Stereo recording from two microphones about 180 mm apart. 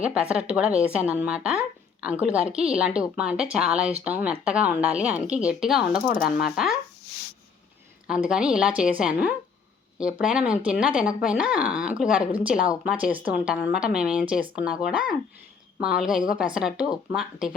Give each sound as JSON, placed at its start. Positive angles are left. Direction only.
{"t": 0.0, "sound": "a woman's voice", "side_deg": -5}
{"t": 8.0, "sound": "a woman's voice", "side_deg": -5}